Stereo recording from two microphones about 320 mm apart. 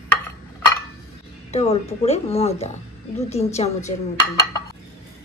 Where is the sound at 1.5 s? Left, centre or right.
Centre.